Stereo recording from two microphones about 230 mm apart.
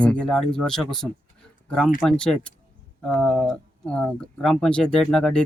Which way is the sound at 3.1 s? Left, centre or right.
Centre.